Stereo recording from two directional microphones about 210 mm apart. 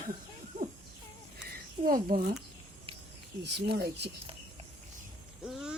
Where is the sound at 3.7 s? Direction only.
55° right (ahead or behind).